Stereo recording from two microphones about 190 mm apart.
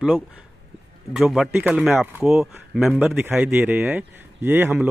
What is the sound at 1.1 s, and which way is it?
A man's voice, centre (ahead or behind).